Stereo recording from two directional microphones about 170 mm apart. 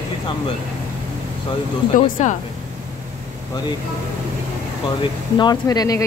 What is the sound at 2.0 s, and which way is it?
Speech, 50° left (ahead or behind).